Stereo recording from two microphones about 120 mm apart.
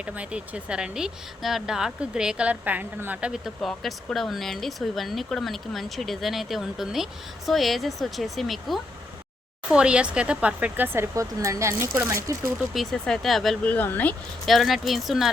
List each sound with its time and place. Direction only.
0.0 s speech: 10° right (ahead or behind)
12.5 s speech: centre (ahead or behind)
13.7 s speech: 15° left (ahead or behind)
14.4 s speech: centre (ahead or behind)